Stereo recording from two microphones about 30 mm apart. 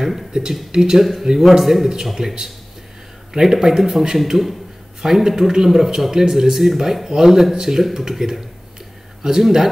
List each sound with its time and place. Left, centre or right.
0.3 s speech: right
1.6 s speech: centre
7.1 s speech: centre